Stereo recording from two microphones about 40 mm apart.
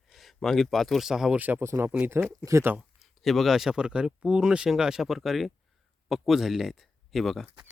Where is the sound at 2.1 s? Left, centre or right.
Right.